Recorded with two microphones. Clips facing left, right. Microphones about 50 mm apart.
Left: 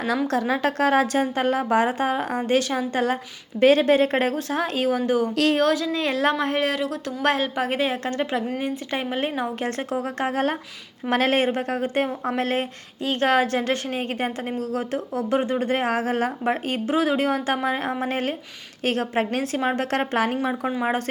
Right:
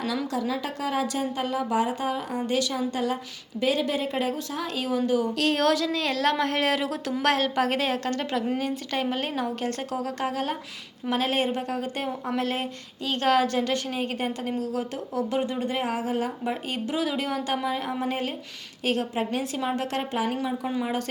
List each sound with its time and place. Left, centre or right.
0.3 s a woman's voice: left
5.5 s a woman's voice: centre
5.9 s a woman's voice: left
6.3 s a woman's voice: centre
6.7 s a woman's voice: centre; by 20.1 s left